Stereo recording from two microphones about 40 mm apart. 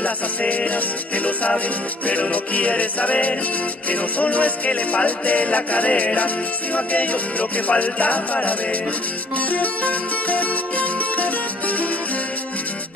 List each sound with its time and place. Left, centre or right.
0.5 s music: left